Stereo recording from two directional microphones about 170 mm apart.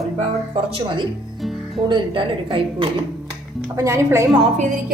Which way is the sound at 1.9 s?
30° right (ahead or behind).